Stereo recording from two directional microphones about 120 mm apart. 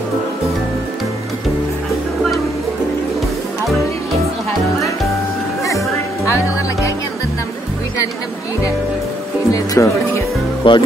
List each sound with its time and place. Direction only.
3.6 s music: centre (ahead or behind)
5.6 s music: 25° left (ahead or behind)
9.5 s music: 25° left (ahead or behind)
10.6 s speech: 45° left (ahead or behind)